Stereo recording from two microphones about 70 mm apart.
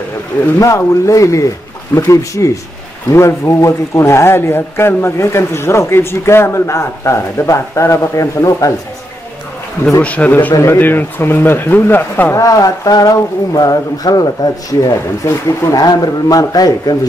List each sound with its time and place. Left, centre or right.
0.6 s a man's voice: left
10.0 s speech: left
10.6 s a man's voice: left
12.4 s speech: left